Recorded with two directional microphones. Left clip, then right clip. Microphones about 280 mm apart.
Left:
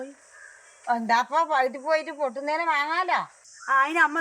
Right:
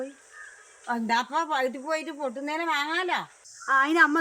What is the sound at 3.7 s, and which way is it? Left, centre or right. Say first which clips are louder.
Speech: even; centre.